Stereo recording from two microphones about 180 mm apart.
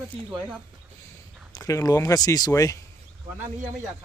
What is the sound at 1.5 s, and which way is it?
Speech, 20° left (ahead or behind).